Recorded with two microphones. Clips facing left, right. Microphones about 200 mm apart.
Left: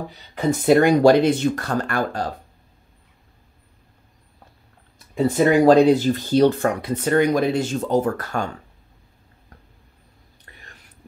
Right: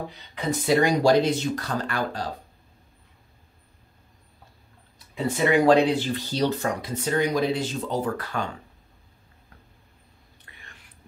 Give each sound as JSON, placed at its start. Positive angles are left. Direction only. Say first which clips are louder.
{"t": 0.3, "sound": "speech", "louder": "left 7 dB", "side_deg": 50}
{"t": 5.1, "sound": "speech", "louder": "left 5 dB", "side_deg": 45}